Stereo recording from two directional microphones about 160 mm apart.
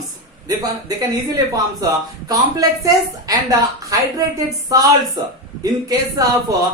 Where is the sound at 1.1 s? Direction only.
20° right (ahead or behind).